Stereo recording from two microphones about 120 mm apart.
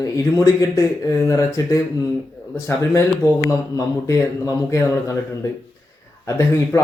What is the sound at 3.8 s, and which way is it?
Speech, 25° left (ahead or behind).